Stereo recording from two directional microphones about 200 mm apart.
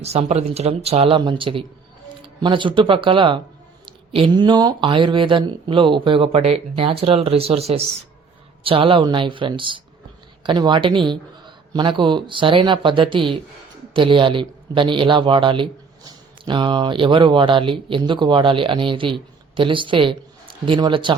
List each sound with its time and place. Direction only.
0.0 s speech: 30° right (ahead or behind)